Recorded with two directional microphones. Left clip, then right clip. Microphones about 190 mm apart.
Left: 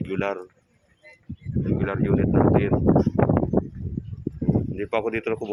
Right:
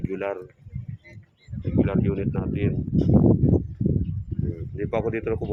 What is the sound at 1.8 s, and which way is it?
Speech, 20° left (ahead or behind).